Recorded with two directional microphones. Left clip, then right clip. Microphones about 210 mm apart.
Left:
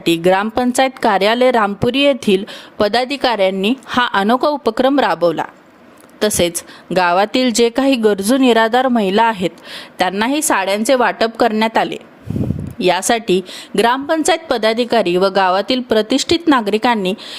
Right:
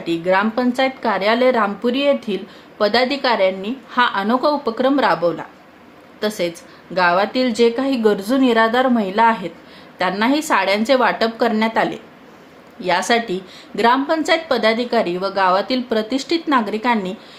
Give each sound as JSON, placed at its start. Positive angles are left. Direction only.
{"t": 0.0, "sound": "a woman's voice", "side_deg": 50}